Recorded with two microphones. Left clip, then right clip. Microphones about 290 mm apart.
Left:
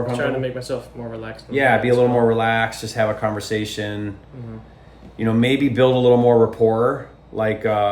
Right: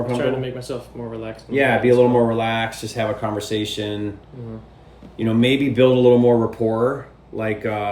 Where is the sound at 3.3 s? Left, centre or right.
Left.